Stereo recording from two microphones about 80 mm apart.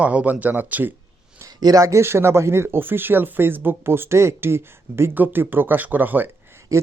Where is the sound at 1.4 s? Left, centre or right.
Right.